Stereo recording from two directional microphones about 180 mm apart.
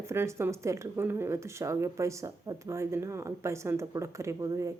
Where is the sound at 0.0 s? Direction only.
15° right (ahead or behind).